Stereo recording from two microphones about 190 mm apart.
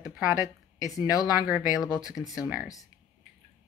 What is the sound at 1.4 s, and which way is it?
Speech, 5° right (ahead or behind).